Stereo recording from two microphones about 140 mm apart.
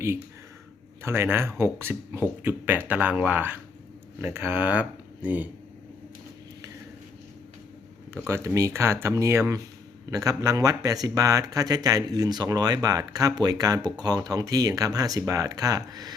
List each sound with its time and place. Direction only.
1.0 s speech: 15° right (ahead or behind)
8.1 s speech: 20° right (ahead or behind)